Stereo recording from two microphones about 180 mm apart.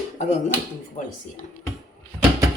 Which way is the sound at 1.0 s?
40° left (ahead or behind).